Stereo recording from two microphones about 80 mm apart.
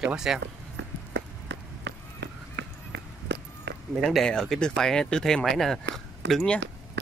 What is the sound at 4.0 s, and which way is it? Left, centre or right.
Speech, centre.